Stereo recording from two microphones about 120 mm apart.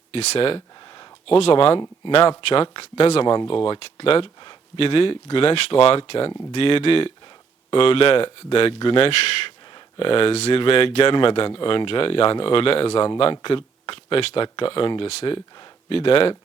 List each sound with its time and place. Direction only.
0.1 s speech: 55° left (ahead or behind)